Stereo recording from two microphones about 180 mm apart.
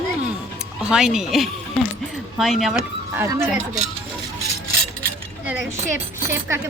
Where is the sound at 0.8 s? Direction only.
5° right (ahead or behind).